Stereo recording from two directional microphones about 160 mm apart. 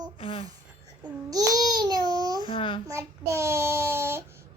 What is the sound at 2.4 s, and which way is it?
Speech, 30° left (ahead or behind).